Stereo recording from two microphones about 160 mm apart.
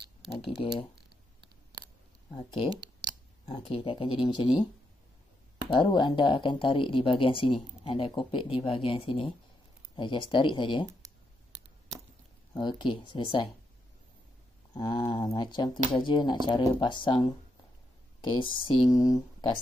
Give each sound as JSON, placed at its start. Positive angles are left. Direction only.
{"t": 2.3, "sound": "speech", "side_deg": 30}
{"t": 5.7, "sound": "speech", "side_deg": 30}
{"t": 12.5, "sound": "speech", "side_deg": 30}
{"t": 14.7, "sound": "speech", "side_deg": 25}
{"t": 18.9, "sound": "speech", "side_deg": 20}